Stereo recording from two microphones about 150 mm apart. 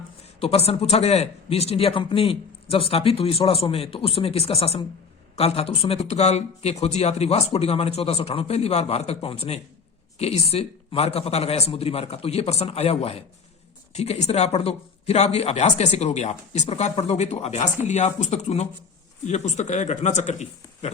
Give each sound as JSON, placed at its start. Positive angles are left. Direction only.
{"t": 0.3, "sound": "speech", "side_deg": 40}